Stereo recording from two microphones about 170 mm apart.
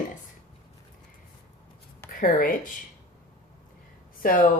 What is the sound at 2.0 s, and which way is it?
Speech, 55° left (ahead or behind).